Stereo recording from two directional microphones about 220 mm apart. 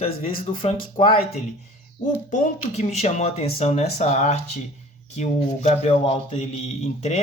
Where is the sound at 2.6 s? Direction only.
30° left (ahead or behind).